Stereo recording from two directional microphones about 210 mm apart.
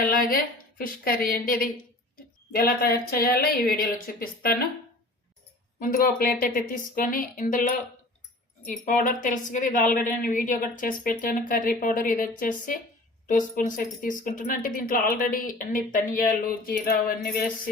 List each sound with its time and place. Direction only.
0.0 s speech: 45° left (ahead or behind)
5.8 s speech: 45° left (ahead or behind)
8.8 s speech: 40° left (ahead or behind)